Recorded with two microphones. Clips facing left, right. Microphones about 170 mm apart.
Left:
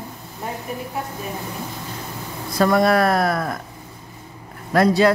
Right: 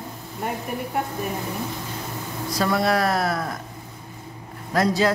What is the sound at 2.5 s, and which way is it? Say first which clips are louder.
Speech: left 5 dB; 50° left (ahead or behind).